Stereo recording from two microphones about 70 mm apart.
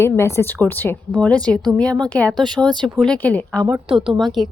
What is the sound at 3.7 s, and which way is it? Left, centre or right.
Speech, centre.